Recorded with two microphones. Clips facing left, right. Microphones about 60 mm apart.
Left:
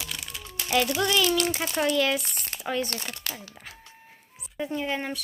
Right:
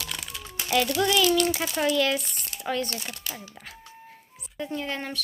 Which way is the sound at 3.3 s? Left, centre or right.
Left.